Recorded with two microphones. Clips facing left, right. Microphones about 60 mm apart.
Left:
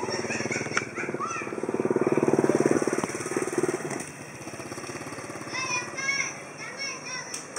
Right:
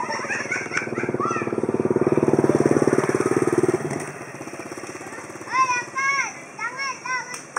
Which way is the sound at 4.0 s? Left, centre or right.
Right.